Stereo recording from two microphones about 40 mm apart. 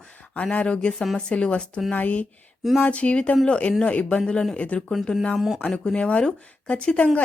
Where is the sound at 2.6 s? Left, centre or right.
Centre.